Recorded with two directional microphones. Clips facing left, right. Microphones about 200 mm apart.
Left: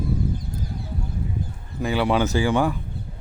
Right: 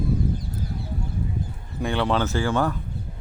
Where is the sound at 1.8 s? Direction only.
5° left (ahead or behind).